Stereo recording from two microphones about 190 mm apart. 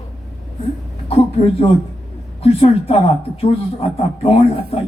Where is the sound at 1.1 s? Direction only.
30° left (ahead or behind).